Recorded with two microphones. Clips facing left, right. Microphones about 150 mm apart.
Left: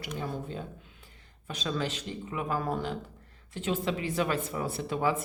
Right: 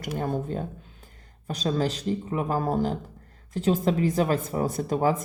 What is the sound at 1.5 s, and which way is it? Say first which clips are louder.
Speech: right 6 dB; 40° right (ahead or behind).